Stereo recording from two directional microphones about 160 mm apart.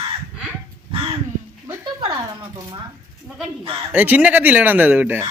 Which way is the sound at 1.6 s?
25° right (ahead or behind).